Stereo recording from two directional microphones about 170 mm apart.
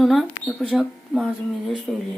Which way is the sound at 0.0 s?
Centre (ahead or behind).